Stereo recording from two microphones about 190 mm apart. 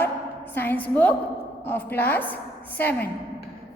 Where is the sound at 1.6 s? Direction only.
10° left (ahead or behind).